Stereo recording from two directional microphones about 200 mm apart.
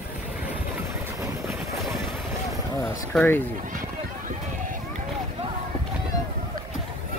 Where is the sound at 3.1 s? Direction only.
10° left (ahead or behind).